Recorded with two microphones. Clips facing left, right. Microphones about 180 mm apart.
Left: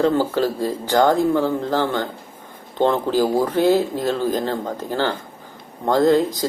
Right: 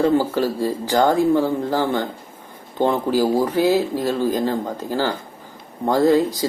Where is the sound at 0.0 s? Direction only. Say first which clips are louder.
Even; 10° right (ahead or behind).